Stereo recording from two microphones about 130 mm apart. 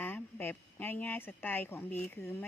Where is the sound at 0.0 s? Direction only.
15° left (ahead or behind).